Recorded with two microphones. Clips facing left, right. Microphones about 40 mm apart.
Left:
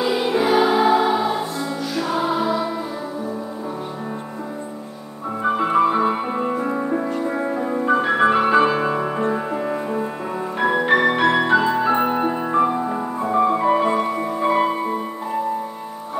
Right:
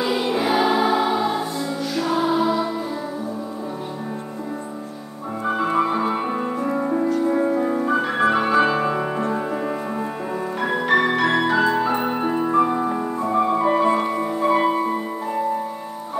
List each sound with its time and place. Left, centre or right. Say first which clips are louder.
0.0 s music: left 2 dB; centre
5.5 s music: left 3 dB; centre